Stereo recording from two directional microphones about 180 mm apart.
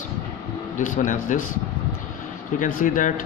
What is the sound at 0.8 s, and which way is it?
Speech, 45° left (ahead or behind).